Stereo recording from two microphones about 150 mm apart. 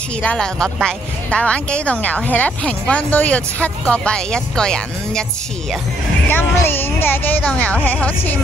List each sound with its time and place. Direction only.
0.2 s speech: 5° left (ahead or behind)
6.2 s speech: 15° left (ahead or behind)